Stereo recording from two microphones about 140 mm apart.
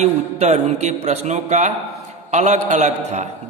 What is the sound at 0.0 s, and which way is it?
A man's voice, 50° right (ahead or behind).